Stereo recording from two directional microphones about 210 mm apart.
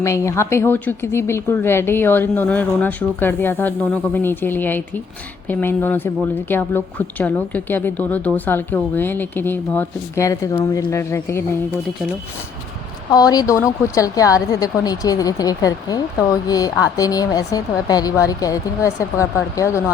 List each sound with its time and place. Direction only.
0.0 s a woman's voice: 15° left (ahead or behind)
13.1 s a woman's voice: 15° left (ahead or behind)